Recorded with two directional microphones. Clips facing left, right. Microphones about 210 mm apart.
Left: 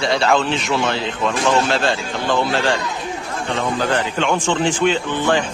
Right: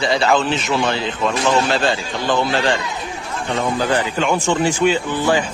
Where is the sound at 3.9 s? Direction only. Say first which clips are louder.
Right 1 dB; 10° right (ahead or behind).